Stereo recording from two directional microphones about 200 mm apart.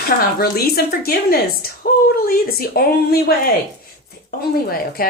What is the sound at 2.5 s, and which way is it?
Speech, 50° left (ahead or behind).